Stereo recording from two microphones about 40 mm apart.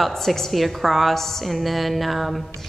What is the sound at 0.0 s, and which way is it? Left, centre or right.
Speech, centre.